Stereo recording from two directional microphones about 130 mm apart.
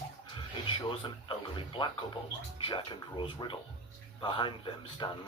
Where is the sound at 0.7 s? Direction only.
40° left (ahead or behind).